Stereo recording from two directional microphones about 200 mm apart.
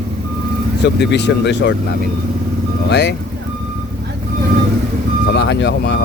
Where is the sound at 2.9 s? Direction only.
55° left (ahead or behind).